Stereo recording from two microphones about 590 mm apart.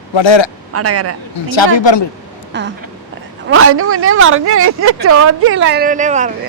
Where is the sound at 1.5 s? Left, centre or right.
Left.